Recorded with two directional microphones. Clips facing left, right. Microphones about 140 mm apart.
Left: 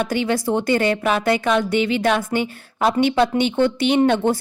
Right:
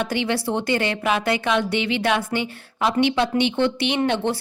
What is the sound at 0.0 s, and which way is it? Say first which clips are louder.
A woman's voice: left 3 dB; 45° left (ahead or behind).